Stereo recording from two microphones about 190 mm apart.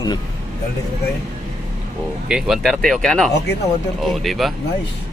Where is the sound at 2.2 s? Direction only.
5° right (ahead or behind).